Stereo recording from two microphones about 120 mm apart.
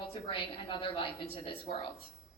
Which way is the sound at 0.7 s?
50° left (ahead or behind).